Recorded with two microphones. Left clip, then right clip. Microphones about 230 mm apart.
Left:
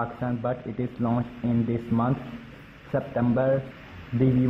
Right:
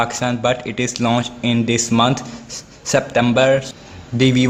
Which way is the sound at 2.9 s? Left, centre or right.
Right.